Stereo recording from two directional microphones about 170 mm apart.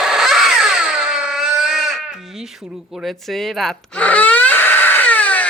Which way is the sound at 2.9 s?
Centre (ahead or behind).